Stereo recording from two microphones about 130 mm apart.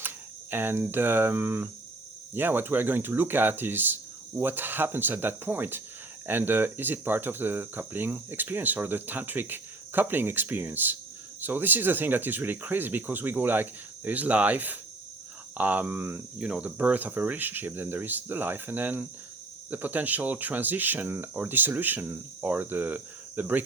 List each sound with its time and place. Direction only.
0.5 s speech: 15° right (ahead or behind)